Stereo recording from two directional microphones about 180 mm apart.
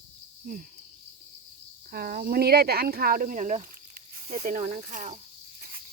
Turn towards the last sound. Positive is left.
turn(degrees=-45)  # may be behind; listen again after turning